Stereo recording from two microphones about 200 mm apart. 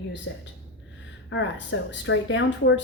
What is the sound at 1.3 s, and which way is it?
Speech, 65° left (ahead or behind).